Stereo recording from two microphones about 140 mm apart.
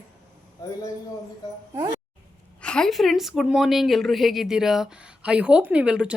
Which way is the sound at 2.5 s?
5° left (ahead or behind).